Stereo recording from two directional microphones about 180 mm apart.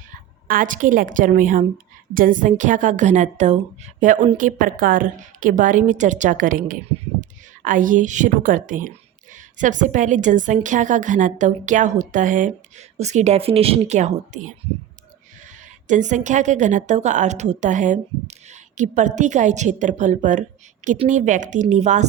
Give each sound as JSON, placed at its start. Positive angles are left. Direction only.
{"t": 0.4, "sound": "a woman's voice", "side_deg": -50}
{"t": 15.9, "sound": "a woman's voice", "side_deg": -45}